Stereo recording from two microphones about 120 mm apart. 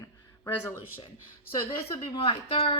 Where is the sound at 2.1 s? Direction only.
50° left (ahead or behind).